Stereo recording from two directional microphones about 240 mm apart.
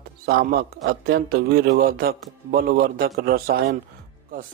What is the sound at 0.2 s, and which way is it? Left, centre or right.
Speech, right.